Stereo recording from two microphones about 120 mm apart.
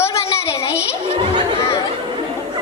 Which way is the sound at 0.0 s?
20° left (ahead or behind).